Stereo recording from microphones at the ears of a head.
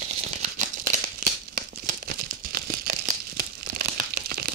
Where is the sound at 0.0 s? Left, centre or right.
Right.